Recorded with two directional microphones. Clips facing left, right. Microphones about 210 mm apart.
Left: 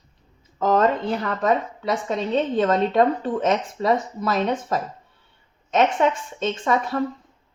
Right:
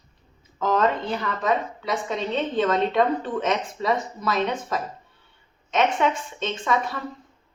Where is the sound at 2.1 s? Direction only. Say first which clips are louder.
Left 4 dB; 35° left (ahead or behind).